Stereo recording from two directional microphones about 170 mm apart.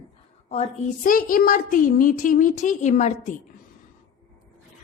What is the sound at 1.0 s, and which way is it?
A child's voice, 55° left (ahead or behind).